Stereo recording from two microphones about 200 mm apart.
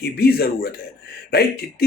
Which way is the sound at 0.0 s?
50° left (ahead or behind).